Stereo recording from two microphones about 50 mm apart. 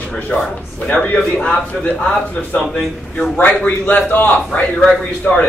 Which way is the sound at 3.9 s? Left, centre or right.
Left.